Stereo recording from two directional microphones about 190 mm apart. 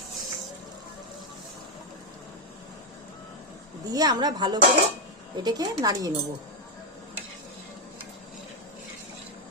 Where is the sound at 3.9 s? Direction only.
20° right (ahead or behind).